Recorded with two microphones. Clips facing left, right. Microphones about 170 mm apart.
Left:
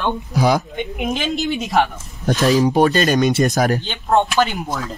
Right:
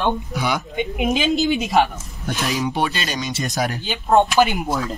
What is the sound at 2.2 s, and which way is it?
Speech, 35° left (ahead or behind).